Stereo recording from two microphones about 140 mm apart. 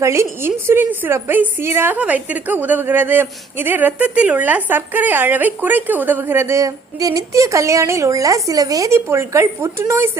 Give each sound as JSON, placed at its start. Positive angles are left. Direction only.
{"t": 0.0, "sound": "a woman's voice", "side_deg": -20}